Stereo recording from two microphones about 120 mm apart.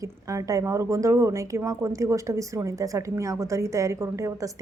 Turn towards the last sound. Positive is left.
turn(degrees=-25)  # may be behind; listen again after turning